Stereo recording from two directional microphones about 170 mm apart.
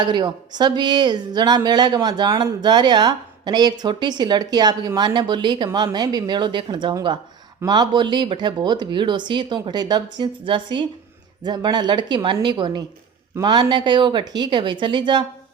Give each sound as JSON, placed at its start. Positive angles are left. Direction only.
{"t": 0.0, "sound": "speech", "side_deg": -25}